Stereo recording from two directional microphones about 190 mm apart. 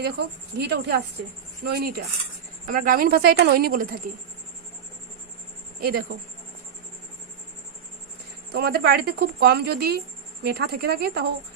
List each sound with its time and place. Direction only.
0.0 s speech: 60° right (ahead or behind)
5.8 s speech: 55° right (ahead or behind)
8.5 s speech: 55° right (ahead or behind)